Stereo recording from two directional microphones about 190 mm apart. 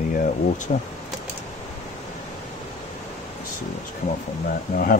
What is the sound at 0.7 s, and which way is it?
Speech, 40° left (ahead or behind).